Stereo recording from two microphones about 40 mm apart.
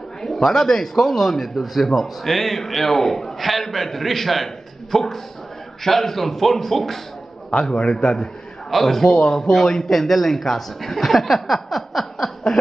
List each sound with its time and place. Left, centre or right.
0.2 s a man's voice: centre
7.7 s a man's voice: left
8.6 s a man's voice: centre